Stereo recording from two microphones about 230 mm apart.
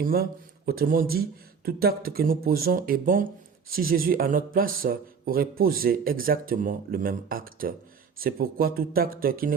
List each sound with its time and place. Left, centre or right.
0.0 s speech: right